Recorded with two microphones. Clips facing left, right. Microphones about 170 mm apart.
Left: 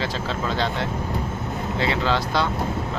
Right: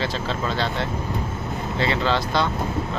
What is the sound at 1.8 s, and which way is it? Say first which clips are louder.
Speech: right 1 dB; 10° left (ahead or behind).